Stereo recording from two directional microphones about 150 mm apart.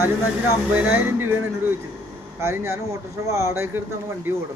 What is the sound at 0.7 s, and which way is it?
Speech, 10° right (ahead or behind).